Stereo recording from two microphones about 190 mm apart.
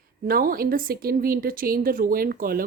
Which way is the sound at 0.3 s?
50° right (ahead or behind).